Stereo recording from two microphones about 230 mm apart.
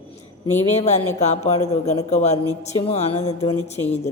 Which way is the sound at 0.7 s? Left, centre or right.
Left.